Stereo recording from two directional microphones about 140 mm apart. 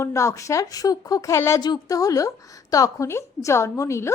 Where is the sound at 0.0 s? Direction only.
20° left (ahead or behind).